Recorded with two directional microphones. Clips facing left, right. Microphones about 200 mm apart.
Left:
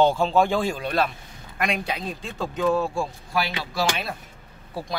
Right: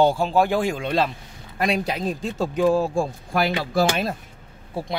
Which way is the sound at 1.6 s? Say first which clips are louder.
Right 4 dB; 40° right (ahead or behind).